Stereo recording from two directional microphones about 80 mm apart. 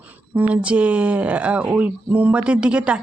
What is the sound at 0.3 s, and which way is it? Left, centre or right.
Speech, centre.